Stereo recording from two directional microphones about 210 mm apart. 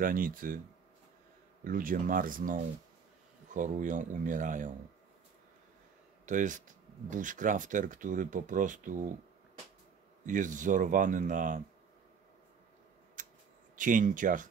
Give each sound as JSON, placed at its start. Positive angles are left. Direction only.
{"t": 0.0, "sound": "speech", "side_deg": -40}
{"t": 1.6, "sound": "speech", "side_deg": -40}
{"t": 6.2, "sound": "speech", "side_deg": -35}
{"t": 10.2, "sound": "speech", "side_deg": -35}
{"t": 13.2, "sound": "a sound", "side_deg": -40}
{"t": 13.7, "sound": "speech", "side_deg": -40}